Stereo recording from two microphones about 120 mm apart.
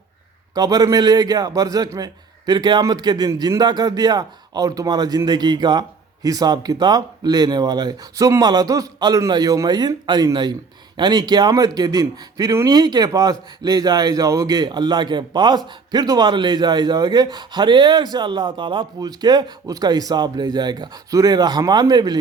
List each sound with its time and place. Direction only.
0.5 s a man's voice: 35° right (ahead or behind)